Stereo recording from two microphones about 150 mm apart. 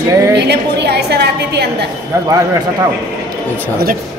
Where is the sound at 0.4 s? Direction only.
90° right.